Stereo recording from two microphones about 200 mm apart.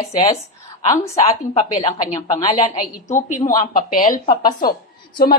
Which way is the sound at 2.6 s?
40° left (ahead or behind).